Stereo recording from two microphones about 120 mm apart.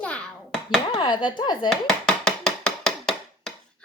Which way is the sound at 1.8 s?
5° left (ahead or behind).